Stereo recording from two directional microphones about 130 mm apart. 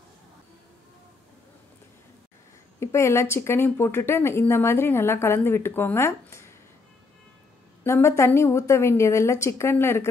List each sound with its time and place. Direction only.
2.8 s speech: 20° left (ahead or behind)
7.8 s speech: 20° left (ahead or behind)